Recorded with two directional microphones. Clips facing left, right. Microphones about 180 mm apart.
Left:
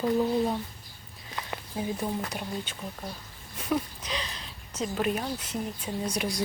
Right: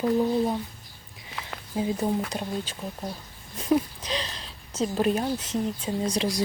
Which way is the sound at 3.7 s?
25° right (ahead or behind).